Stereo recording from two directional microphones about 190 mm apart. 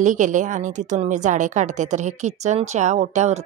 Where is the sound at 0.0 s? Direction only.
40° right (ahead or behind).